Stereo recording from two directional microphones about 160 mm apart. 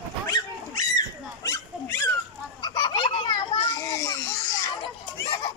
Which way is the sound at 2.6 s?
30° left (ahead or behind).